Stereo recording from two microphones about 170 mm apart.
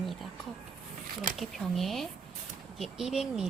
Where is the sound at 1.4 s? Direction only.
Centre (ahead or behind).